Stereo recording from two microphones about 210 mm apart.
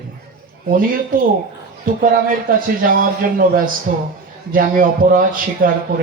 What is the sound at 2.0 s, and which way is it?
A man's voice, 40° right (ahead or behind).